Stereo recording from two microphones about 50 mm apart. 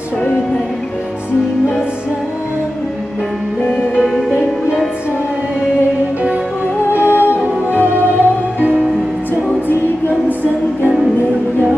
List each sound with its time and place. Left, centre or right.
7.0 s music: right